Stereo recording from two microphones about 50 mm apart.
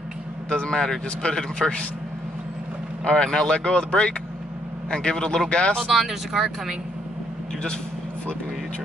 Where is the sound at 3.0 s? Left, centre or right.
Centre.